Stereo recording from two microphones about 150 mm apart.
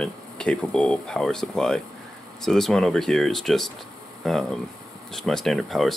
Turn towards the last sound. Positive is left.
turn(degrees=0)  # may be behind; listen again after turning